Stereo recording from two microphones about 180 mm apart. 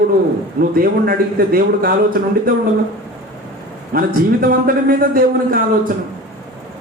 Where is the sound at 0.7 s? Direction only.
55° right (ahead or behind).